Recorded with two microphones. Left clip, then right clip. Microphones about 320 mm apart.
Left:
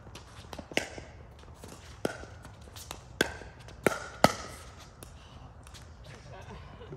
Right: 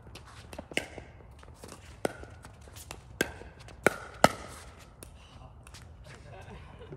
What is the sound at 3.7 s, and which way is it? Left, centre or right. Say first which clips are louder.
Chop: right 2 dB; centre.